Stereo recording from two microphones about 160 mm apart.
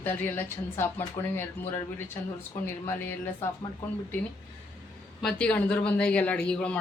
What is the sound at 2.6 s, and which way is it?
Speech, 15° left (ahead or behind).